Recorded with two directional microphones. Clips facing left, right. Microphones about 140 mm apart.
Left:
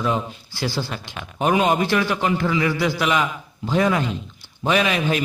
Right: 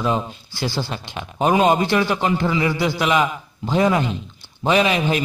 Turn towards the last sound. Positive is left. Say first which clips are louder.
# right 2 dB
turn(degrees=-25)  # may be behind; listen again after turning